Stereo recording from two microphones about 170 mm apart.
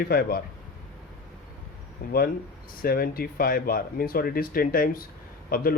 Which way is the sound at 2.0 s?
55° left (ahead or behind).